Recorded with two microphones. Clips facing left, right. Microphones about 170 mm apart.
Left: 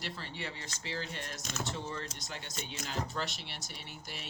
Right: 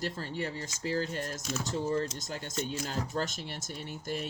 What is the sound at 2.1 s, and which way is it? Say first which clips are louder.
Speech: right 8 dB; 45° right (ahead or behind).